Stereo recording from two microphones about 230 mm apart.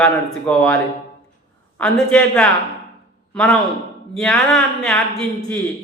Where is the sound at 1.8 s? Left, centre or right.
Centre.